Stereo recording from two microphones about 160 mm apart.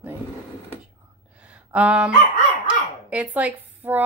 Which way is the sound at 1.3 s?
10° right (ahead or behind).